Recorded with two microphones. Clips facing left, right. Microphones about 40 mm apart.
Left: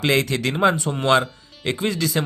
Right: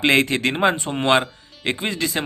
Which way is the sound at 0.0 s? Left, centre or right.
Right.